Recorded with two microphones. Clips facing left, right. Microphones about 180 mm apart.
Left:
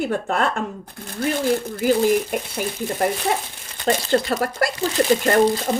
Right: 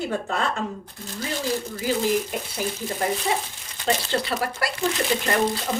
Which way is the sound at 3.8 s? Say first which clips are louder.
Left 5 dB; 45° left (ahead or behind).